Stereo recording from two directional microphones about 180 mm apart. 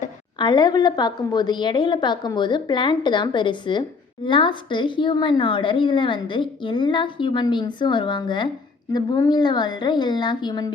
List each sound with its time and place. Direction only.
0.3 s a woman's voice: 25° left (ahead or behind)